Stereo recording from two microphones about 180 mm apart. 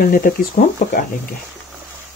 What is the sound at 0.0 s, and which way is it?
Speech, 50° left (ahead or behind).